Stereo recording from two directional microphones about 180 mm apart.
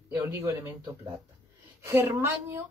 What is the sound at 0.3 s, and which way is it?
Speech, 15° right (ahead or behind).